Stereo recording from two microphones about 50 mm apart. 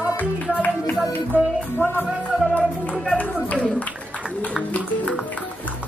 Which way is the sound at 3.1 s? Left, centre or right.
Left.